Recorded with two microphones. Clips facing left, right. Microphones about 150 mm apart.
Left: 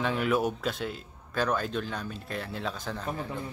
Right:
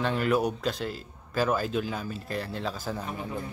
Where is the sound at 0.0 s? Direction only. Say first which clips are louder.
Right 1 dB; centre (ahead or behind).